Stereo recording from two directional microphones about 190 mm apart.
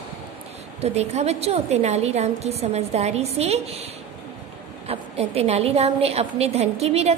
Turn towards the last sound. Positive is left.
turn(degrees=-35)  # may be behind; listen again after turning